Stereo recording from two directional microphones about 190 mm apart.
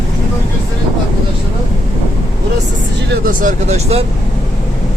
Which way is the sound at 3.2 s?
40° right (ahead or behind).